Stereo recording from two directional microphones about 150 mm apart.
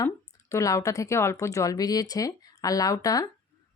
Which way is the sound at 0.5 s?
20° left (ahead or behind).